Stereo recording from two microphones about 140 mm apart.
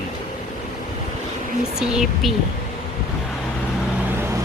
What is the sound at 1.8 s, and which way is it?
Speech, 5° right (ahead or behind).